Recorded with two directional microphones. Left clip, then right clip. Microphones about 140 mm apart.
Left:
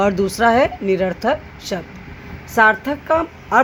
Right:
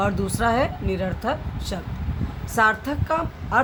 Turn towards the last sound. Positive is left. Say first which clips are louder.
# left 7 dB
turn(degrees=55)  # may be behind; listen again after turning